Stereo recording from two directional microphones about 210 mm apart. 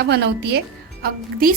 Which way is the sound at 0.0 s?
55° right (ahead or behind).